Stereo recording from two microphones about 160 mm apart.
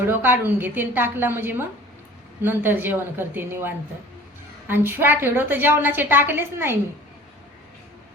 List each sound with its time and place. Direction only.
0.0 s a woman's voice: 15° right (ahead or behind)